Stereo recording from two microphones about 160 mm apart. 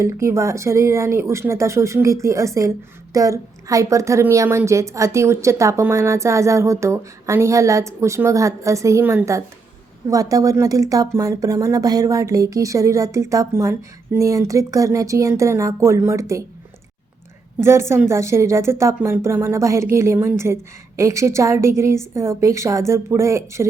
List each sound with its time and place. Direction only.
0.0 s speech: 20° right (ahead or behind)
17.6 s a woman's voice: 15° right (ahead or behind)